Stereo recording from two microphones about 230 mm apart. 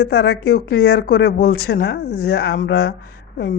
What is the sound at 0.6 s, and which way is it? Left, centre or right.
Speech, left.